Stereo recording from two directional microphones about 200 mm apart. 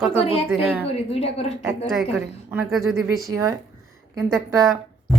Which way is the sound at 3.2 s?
15° right (ahead or behind).